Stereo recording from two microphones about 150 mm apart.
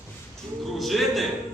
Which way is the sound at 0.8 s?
Centre (ahead or behind).